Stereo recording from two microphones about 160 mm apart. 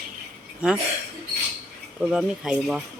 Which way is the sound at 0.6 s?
5° right (ahead or behind).